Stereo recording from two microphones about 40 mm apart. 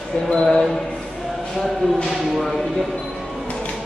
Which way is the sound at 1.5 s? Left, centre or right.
Centre.